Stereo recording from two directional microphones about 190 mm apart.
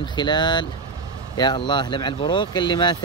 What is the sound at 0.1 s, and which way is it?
Speech, 25° left (ahead or behind).